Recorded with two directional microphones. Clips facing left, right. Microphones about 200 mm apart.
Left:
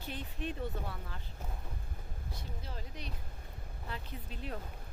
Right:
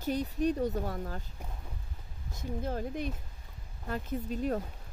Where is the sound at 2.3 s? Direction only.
50° right (ahead or behind).